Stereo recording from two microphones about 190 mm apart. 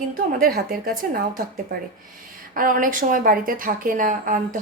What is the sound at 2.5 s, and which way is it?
A woman's voice, 45° right (ahead or behind).